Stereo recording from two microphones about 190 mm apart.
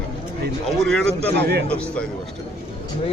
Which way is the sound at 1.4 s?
60° right (ahead or behind).